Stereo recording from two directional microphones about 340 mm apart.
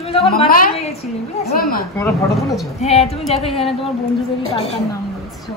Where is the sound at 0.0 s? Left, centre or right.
Centre.